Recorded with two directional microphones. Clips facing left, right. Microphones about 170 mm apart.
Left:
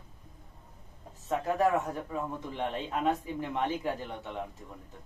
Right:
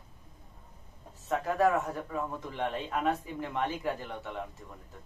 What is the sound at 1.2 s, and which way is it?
A man's voice, 15° left (ahead or behind).